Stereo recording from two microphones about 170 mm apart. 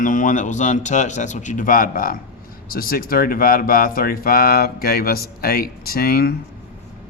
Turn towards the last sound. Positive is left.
turn(degrees=65)  # may be behind; listen again after turning